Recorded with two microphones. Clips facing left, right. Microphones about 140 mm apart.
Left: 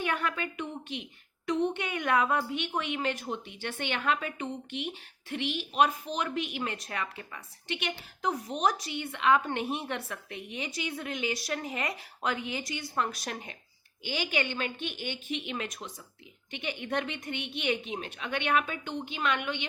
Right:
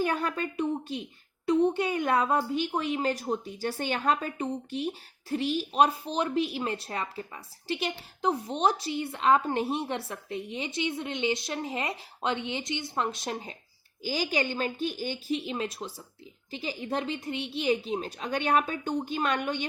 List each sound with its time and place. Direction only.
0.0 s a woman's voice: 35° right (ahead or behind)
14.0 s a woman's voice: 40° right (ahead or behind)